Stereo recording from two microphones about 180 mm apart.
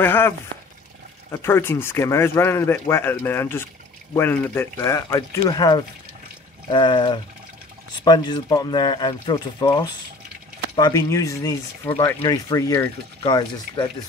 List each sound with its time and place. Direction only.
0.0 s speech: 10° left (ahead or behind)
1.3 s speech: 15° left (ahead or behind)